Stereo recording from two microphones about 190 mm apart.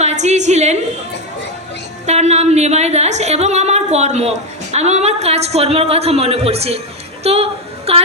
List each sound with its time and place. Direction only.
0.0 s a woman's voice: 35° right (ahead or behind)
2.0 s a woman's voice: 35° right (ahead or behind)